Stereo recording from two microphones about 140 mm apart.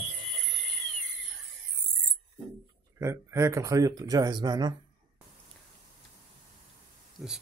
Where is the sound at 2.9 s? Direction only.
20° right (ahead or behind).